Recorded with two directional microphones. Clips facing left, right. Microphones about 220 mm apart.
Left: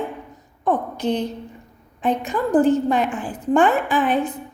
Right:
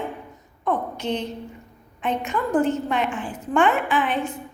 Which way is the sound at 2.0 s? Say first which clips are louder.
Left 4 dB; 35° left (ahead or behind).